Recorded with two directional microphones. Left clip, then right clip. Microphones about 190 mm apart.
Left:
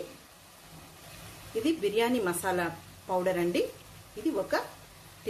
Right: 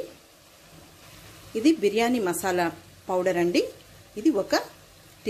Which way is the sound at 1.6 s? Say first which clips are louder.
Right 6 dB; 35° right (ahead or behind).